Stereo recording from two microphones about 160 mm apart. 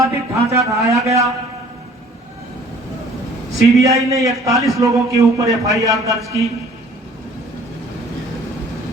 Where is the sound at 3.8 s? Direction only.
20° right (ahead or behind).